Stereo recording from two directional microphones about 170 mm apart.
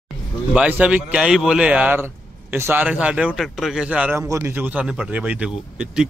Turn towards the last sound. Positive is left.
turn(degrees=-5)  # may be behind; listen again after turning